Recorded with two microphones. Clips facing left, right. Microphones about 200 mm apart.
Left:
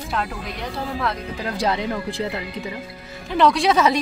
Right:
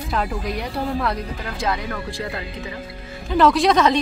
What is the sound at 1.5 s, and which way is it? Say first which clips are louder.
Speech: left 2 dB; 30° left (ahead or behind).